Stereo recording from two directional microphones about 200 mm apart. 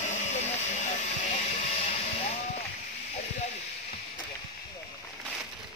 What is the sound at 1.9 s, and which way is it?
Music, 30° left (ahead or behind).